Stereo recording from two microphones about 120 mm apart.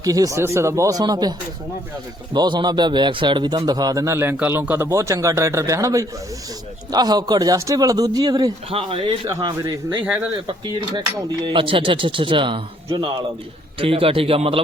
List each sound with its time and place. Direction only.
0.0 s a man's voice: 30° right (ahead or behind)
2.3 s a man's voice: 40° right (ahead or behind)
8.7 s a man's voice: 50° right (ahead or behind)
9.6 s speech: 35° right (ahead or behind)
10.0 s speech: 15° right (ahead or behind)
11.4 s a man's voice: 45° right (ahead or behind)